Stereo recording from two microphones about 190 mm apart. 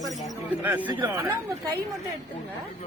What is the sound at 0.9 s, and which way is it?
Speech, 20° right (ahead or behind).